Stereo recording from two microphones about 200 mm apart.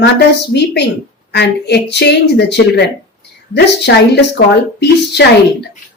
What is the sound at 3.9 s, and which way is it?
Speech, 60° left (ahead or behind).